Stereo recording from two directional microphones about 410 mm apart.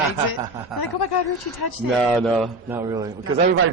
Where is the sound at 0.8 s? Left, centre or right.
Left.